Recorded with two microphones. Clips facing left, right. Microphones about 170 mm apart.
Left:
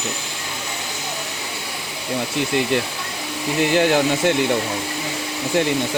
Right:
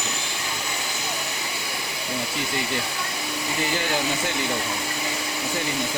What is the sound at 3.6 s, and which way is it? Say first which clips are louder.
Speech: left 10 dB; 70° left (ahead or behind).